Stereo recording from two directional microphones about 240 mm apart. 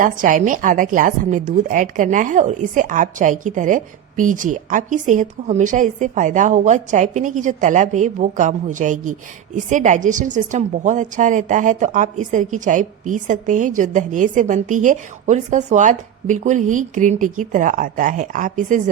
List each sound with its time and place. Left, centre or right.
0.0 s a woman's voice: right